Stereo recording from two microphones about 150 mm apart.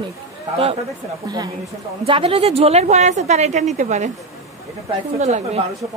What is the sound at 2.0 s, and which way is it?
Speech, 40° right (ahead or behind).